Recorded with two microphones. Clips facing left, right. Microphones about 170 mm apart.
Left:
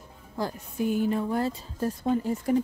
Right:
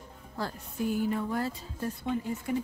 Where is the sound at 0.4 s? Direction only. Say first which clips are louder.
Left 4 dB; 20° left (ahead or behind).